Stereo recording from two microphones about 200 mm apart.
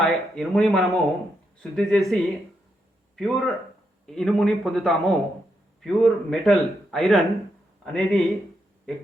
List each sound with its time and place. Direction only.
0.0 s speech: centre (ahead or behind)